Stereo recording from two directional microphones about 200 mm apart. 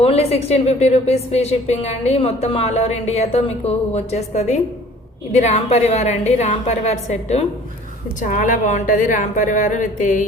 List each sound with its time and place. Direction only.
0.0 s a woman's voice: 30° left (ahead or behind)